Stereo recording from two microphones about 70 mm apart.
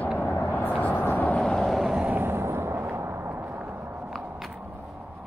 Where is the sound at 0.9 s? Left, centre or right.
Left.